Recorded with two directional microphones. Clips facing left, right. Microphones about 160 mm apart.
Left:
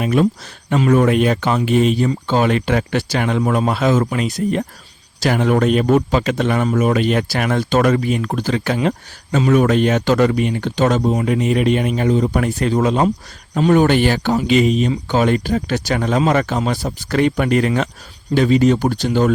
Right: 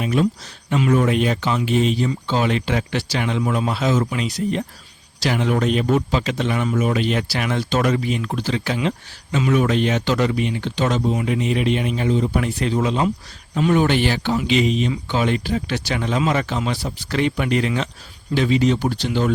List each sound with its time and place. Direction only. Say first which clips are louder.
0.0 s a man's voice: left 4 dB; 55° left (ahead or behind)